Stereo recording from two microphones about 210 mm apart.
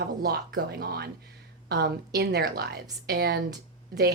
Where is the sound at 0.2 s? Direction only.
50° right (ahead or behind).